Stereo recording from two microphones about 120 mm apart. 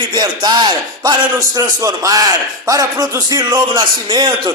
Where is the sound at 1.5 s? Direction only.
30° right (ahead or behind).